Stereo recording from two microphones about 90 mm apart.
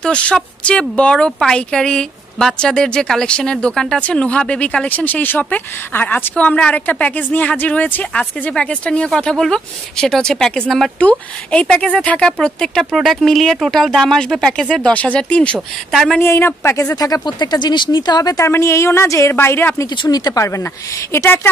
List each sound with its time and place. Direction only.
0.0 s speech: 10° left (ahead or behind)
15.9 s speech: centre (ahead or behind)
16.2 s a woman's voice: 25° left (ahead or behind)
16.9 s speech: 45° left (ahead or behind)
18.5 s a woman's voice: 30° left (ahead or behind)
20.0 s a woman's voice: 50° left (ahead or behind); by 21.5 s 30° left (ahead or behind)